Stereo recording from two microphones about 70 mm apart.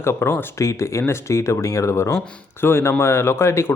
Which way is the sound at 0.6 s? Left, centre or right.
Left.